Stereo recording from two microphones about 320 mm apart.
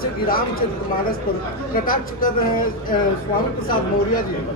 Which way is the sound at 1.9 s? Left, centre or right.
Left.